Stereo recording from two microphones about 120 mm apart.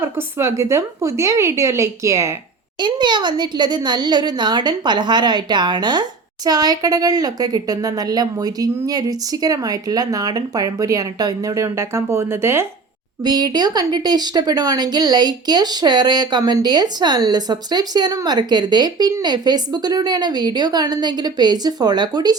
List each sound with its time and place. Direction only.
0.0 s a woman's voice: 20° right (ahead or behind)
2.8 s a woman's voice: 40° right (ahead or behind); by 12.6 s 20° right (ahead or behind)
13.2 s a woman's voice: 35° right (ahead or behind)